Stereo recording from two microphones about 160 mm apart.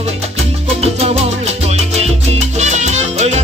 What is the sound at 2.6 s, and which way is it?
Music, 45° right (ahead or behind).